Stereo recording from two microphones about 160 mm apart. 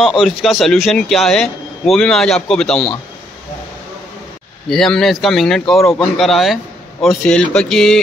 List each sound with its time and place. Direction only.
0.0 s speech: centre (ahead or behind)
4.6 s speech: 5° left (ahead or behind)